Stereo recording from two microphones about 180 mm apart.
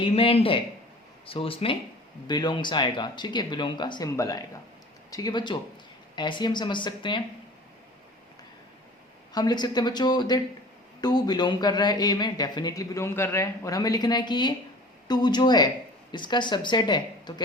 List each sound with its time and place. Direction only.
0.0 s speech: 30° left (ahead or behind)
9.3 s speech: 25° left (ahead or behind)